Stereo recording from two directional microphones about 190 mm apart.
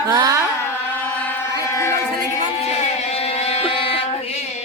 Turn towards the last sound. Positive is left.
turn(degrees=30)  # may be behind; listen again after turning